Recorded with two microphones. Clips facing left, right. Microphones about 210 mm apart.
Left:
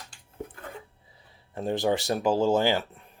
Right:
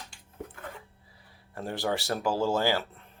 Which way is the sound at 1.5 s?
20° left (ahead or behind).